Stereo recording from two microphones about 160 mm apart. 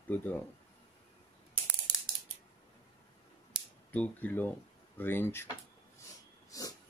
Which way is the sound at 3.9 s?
10° left (ahead or behind).